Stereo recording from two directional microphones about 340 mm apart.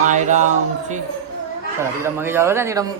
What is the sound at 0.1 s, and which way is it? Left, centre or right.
Speech, right.